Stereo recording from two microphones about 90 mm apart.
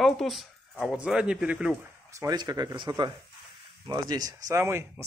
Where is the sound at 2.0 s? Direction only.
35° right (ahead or behind).